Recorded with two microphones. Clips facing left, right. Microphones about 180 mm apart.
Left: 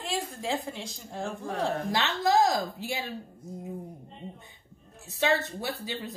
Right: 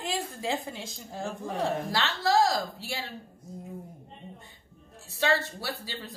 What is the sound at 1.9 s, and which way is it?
Speech, 20° left (ahead or behind).